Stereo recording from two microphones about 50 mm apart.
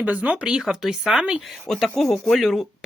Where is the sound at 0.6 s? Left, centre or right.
Centre.